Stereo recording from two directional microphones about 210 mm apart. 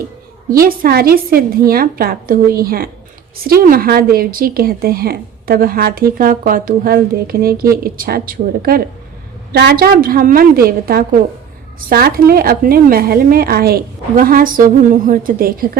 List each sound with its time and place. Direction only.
0.6 s speech: 45° right (ahead or behind)